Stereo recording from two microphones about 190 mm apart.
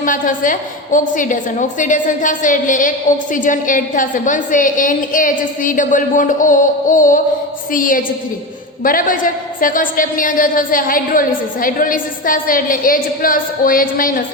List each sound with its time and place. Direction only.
0.0 s a woman's voice: 45° left (ahead or behind)